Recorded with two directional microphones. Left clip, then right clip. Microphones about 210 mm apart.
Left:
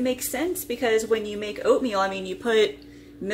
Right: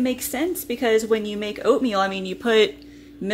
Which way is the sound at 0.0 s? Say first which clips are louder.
Right 2 dB; 45° right (ahead or behind).